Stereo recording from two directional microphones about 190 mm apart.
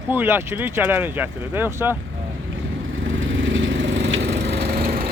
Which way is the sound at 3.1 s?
90° right.